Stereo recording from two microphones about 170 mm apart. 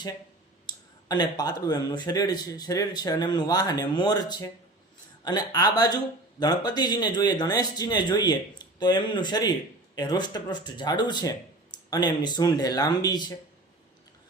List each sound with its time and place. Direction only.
0.7 s speech: 25° left (ahead or behind)